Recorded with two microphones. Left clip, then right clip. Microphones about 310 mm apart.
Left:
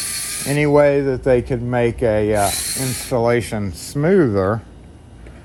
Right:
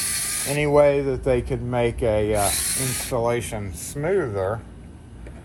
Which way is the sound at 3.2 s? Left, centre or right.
Left.